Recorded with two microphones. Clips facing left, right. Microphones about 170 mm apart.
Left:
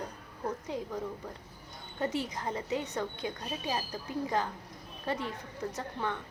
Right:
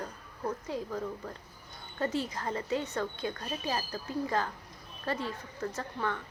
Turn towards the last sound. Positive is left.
turn(degrees=15)  # may be behind; listen again after turning